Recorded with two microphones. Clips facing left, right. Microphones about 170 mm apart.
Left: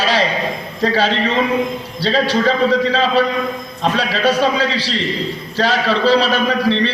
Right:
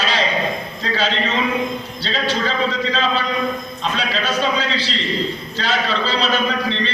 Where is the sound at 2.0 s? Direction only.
65° left (ahead or behind).